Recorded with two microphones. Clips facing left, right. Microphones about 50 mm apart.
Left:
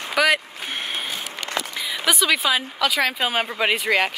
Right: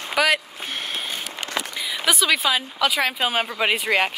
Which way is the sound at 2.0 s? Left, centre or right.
Centre.